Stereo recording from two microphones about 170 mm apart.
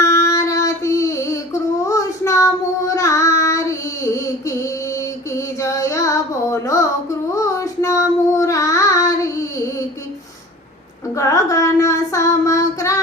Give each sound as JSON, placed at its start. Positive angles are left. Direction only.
{"t": 0.0, "sound": "child singing", "side_deg": 20}
{"t": 11.1, "sound": "child singing", "side_deg": 20}